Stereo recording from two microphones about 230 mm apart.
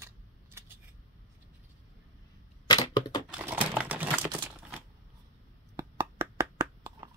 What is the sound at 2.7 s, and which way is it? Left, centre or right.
Typewriter, centre.